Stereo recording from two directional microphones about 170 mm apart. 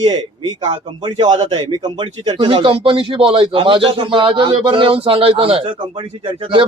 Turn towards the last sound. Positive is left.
turn(degrees=-30)  # may be behind; listen again after turning